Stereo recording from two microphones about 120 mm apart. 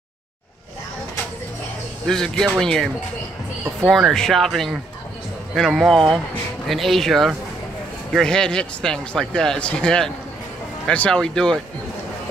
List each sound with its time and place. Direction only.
2.0 s speech: 5° left (ahead or behind)